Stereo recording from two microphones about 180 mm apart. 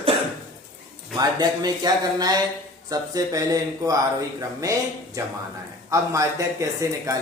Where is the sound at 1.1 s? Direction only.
20° right (ahead or behind).